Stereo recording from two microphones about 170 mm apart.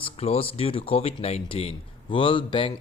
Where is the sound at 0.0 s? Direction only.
35° left (ahead or behind).